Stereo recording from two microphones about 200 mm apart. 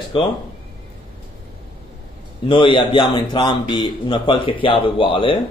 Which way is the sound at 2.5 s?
25° left (ahead or behind).